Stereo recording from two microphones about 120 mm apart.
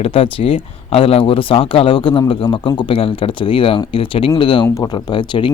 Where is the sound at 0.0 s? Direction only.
50° left (ahead or behind).